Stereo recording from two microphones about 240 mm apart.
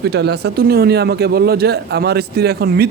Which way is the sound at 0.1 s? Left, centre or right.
Right.